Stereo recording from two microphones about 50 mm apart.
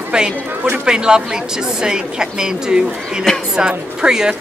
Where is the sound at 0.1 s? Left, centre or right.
Centre.